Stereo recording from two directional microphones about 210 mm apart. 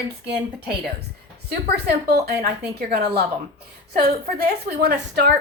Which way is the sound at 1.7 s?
50° right (ahead or behind).